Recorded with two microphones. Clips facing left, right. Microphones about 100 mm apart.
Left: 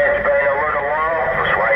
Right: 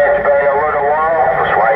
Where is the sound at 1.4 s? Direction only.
15° right (ahead or behind).